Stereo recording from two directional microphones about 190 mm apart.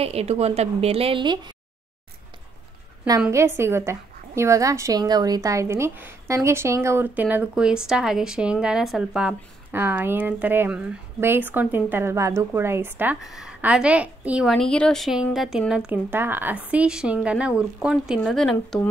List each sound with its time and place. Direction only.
0.0 s a woman's voice: 35° right (ahead or behind)
3.3 s a woman's voice: 15° right (ahead or behind); by 18.8 s centre (ahead or behind)